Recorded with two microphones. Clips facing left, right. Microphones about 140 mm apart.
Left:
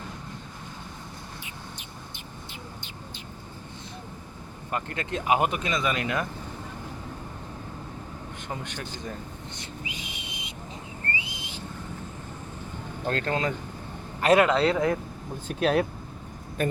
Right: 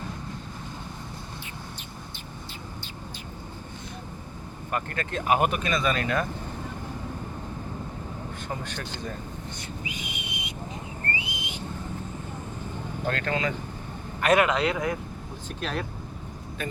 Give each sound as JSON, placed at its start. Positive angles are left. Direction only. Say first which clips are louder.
{"t": 4.7, "sound": "speech", "louder": "even", "side_deg": 20}
{"t": 9.6, "sound": "whistle", "louder": "right 2 dB", "side_deg": 25}
{"t": 11.2, "sound": "whistling", "louder": "right 3 dB", "side_deg": 25}
{"t": 13.1, "sound": "speech", "louder": "left 1 dB", "side_deg": 35}
{"t": 15.4, "sound": "speech", "louder": "left 9 dB", "side_deg": 55}